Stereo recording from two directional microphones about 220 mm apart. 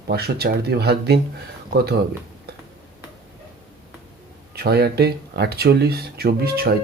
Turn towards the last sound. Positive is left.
turn(degrees=-45)  # may be behind; listen again after turning